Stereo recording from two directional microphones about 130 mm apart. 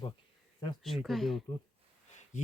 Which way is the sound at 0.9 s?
Centre (ahead or behind).